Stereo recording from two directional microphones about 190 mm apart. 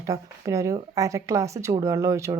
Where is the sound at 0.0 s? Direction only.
15° right (ahead or behind).